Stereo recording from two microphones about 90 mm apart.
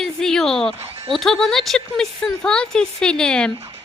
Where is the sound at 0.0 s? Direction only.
5° left (ahead or behind).